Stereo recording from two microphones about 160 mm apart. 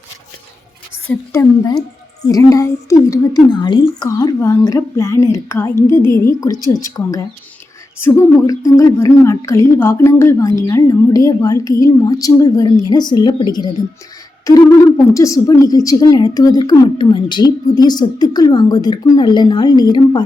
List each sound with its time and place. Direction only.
1.0 s a woman's voice: 20° left (ahead or behind)